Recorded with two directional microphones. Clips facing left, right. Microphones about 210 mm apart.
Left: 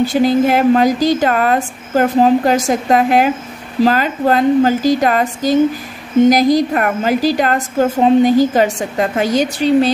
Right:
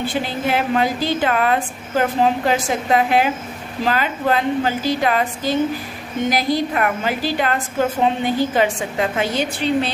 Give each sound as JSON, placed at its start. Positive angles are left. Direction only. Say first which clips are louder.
{"t": 0.0, "sound": "a woman's voice", "louder": "left 10 dB", "side_deg": 40}